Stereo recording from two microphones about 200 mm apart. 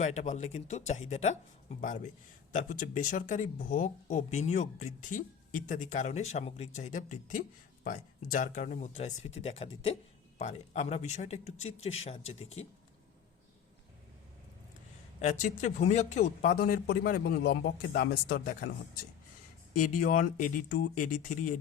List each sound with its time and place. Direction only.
0.0 s speech: 35° left (ahead or behind)
15.2 s speech: 35° left (ahead or behind)
19.7 s speech: 40° left (ahead or behind)